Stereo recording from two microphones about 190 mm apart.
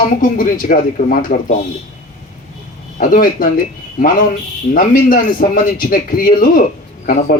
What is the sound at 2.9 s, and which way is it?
A man's voice, 45° left (ahead or behind).